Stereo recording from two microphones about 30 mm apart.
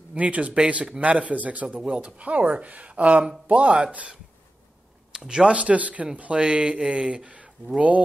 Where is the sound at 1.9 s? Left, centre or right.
Right.